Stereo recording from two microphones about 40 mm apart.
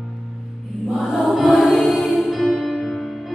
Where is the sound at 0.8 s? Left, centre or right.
Centre.